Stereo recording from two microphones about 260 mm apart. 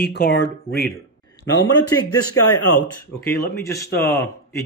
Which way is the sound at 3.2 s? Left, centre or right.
Centre.